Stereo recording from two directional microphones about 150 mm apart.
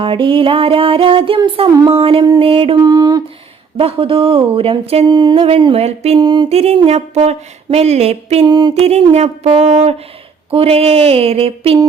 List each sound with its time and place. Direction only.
0.0 s music: 35° right (ahead or behind)
2.8 s a sound: 25° right (ahead or behind)
3.8 s music: 40° right (ahead or behind)
5.0 s music: 30° right (ahead or behind); by 6.1 s 45° right (ahead or behind)
6.1 s a sound: 30° right (ahead or behind)
6.5 s speech: 45° right (ahead or behind)
8.4 s a sound: 30° right (ahead or behind)
8.7 s speech: 45° right (ahead or behind)
10.5 s music: 40° right (ahead or behind)